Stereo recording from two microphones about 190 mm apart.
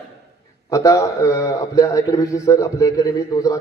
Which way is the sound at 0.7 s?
15° left (ahead or behind).